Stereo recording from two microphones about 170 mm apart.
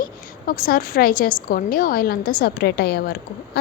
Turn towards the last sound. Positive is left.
turn(degrees=65)  # may be behind; listen again after turning